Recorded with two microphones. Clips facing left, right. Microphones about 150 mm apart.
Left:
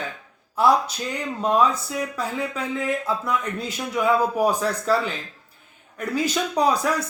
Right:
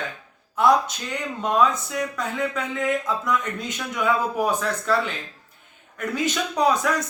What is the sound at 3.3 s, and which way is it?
Speech, 35° left (ahead or behind).